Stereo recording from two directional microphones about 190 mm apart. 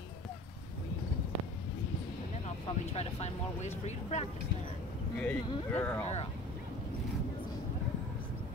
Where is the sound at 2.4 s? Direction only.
35° left (ahead or behind).